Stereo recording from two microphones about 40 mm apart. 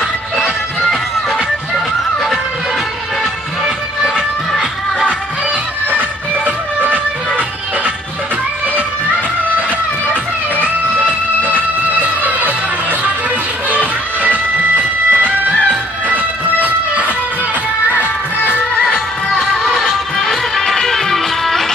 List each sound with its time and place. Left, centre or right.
0.4 s music: centre
5.9 s music: right
11.4 s music: right
13.7 s music: right
16.6 s music: right
19.4 s music: centre